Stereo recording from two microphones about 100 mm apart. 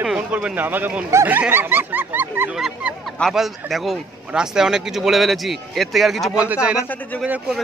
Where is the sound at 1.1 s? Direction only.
25° right (ahead or behind).